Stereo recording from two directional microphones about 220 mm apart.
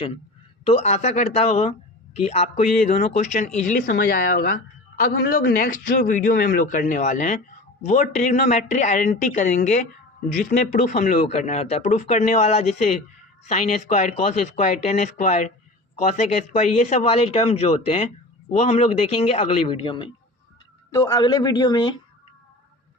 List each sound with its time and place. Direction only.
0.6 s speech: 30° left (ahead or behind)